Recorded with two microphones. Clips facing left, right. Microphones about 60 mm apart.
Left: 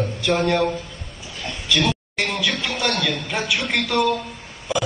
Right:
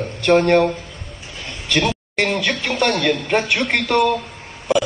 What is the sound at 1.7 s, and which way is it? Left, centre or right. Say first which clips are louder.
Speech: right 2 dB; right.